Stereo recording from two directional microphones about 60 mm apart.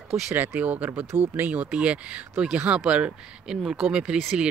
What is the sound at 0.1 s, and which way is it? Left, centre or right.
Speech, centre.